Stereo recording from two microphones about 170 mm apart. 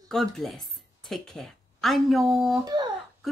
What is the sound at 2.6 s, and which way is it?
Speech, 25° right (ahead or behind).